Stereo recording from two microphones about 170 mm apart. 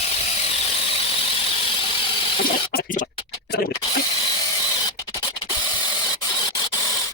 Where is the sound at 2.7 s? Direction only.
50° left (ahead or behind).